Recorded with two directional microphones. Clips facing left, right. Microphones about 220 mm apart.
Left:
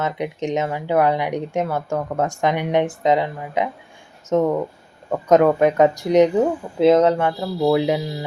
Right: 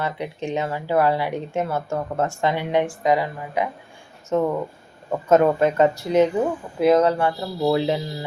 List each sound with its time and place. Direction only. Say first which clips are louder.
0.0 s speech: left 3 dB; 20° left (ahead or behind)